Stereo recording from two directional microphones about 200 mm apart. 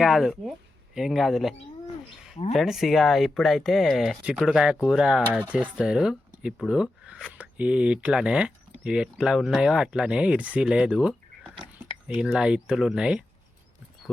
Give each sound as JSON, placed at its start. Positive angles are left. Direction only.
{"t": 0.0, "sound": "speech", "side_deg": 0}
{"t": 2.3, "sound": "speech", "side_deg": 35}
{"t": 2.6, "sound": "speech", "side_deg": 0}
{"t": 12.2, "sound": "speech", "side_deg": -5}